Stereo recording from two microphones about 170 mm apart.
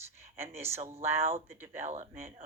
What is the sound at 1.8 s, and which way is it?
Speech, 40° right (ahead or behind).